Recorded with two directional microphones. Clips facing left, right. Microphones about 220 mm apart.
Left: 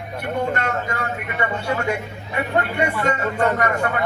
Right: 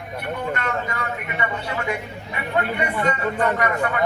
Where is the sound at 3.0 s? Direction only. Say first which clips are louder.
Even; 45° left (ahead or behind).